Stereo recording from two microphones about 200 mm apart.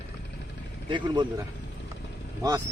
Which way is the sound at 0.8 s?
25° right (ahead or behind).